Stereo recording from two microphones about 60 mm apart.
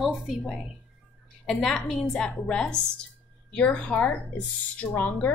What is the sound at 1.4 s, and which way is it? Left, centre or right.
A woman's voice, centre.